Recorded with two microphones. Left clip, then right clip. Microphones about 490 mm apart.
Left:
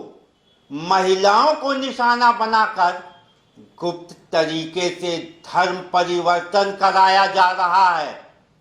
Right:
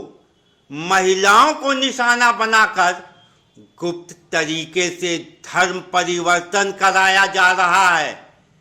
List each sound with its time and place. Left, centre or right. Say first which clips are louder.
0.7 s a man's voice: right 1 dB; right